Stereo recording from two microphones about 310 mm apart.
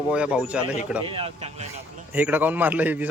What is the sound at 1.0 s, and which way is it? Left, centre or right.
Speech, centre.